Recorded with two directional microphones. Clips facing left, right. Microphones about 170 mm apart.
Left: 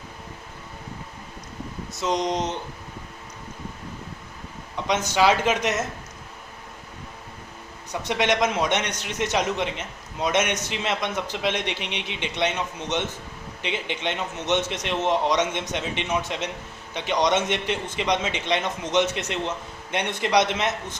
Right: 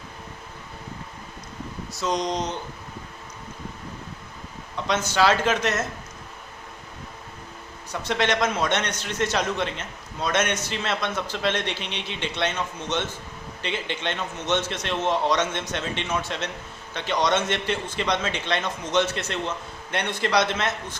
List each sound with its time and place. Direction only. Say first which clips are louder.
1.9 s speech: left 1 dB; 20° left (ahead or behind)
4.9 s a man's voice: left 1 dB; 15° left (ahead or behind)
8.0 s a man's voice: left 1 dB; 15° left (ahead or behind)